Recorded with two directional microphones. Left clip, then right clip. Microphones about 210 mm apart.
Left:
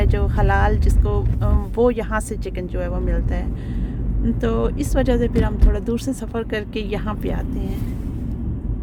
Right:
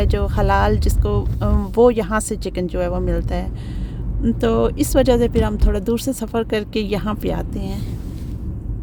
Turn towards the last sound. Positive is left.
turn(degrees=-30)  # may be behind; listen again after turning